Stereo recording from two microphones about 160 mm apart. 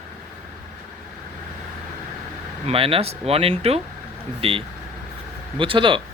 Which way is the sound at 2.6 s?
35° right (ahead or behind).